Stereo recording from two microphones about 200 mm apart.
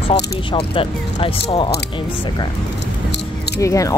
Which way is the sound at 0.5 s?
25° left (ahead or behind).